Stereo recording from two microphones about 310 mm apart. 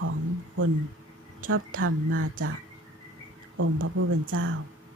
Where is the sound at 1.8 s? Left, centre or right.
Right.